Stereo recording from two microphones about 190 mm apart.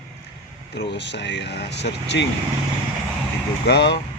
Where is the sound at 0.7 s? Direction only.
65° left (ahead or behind).